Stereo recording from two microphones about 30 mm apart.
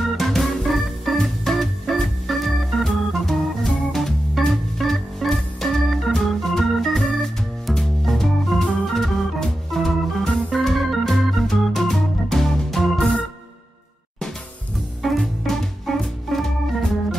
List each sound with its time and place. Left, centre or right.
0.2 s organ: centre
15.0 s music: centre